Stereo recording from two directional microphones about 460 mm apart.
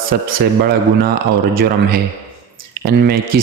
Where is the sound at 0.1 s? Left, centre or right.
Centre.